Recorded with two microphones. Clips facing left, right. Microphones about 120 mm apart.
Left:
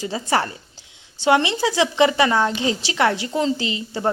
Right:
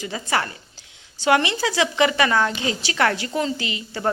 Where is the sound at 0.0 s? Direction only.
30° left (ahead or behind).